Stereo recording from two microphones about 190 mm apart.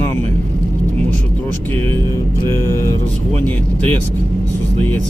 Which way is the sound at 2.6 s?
15° left (ahead or behind).